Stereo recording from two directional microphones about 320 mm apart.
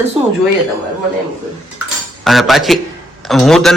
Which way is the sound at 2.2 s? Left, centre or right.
Centre.